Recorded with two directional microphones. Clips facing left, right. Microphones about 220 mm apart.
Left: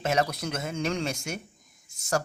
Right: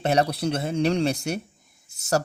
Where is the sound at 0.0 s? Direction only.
35° right (ahead or behind).